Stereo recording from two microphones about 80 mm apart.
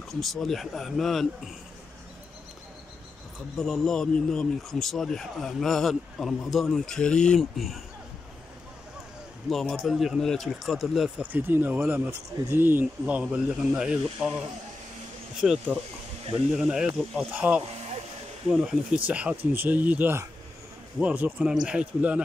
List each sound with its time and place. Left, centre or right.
0.1 s a man's voice: centre
3.5 s a man's voice: centre
7.5 s a man's voice: centre
9.5 s a man's voice: centre
11.1 s speech: right
15.4 s speech: centre; by 17.6 s right
18.5 s speech: centre